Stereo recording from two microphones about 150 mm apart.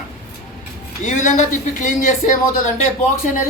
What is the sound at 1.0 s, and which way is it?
Speech, 55° left (ahead or behind).